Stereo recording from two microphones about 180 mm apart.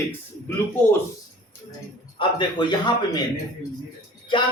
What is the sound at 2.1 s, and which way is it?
Speech, 25° left (ahead or behind).